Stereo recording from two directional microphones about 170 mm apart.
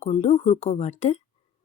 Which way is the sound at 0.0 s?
40° left (ahead or behind).